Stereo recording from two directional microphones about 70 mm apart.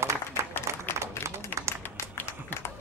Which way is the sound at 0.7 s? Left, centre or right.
Right.